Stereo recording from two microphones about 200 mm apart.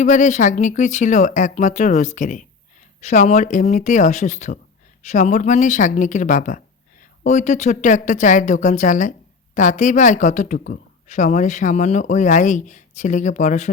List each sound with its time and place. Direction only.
0.0 s speech: 40° left (ahead or behind)